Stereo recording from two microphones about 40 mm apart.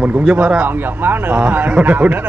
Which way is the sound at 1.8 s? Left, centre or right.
Right.